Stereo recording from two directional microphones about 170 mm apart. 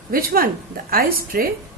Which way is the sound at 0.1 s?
60° right (ahead or behind).